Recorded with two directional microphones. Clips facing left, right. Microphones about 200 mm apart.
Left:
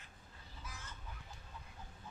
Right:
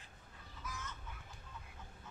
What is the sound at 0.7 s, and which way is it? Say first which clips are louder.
Chicken: right 6 dB; 30° left (ahead or behind).